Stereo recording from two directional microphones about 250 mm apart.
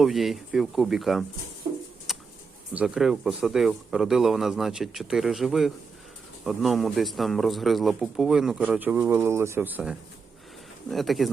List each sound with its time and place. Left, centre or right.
0.0 s speech: centre
2.1 s a sound: centre
2.7 s speech: centre